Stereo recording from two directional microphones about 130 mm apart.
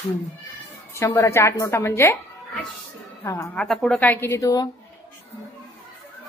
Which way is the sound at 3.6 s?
5° left (ahead or behind).